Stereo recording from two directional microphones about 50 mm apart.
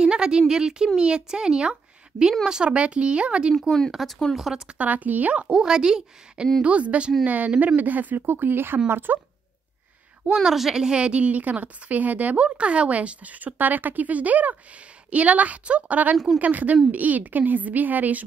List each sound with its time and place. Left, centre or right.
0.0 s a woman's voice: centre
3.9 s speech: centre
4.7 s a woman's voice: right; by 6.5 s centre
6.6 s a woman's voice: right
10.3 s a woman's voice: centre; by 18.2 s right